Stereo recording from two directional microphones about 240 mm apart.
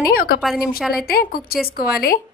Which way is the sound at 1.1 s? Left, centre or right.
Left.